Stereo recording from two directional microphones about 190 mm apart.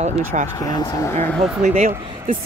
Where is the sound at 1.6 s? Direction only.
35° right (ahead or behind).